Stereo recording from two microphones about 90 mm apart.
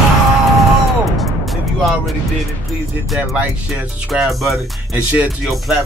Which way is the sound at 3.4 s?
15° right (ahead or behind).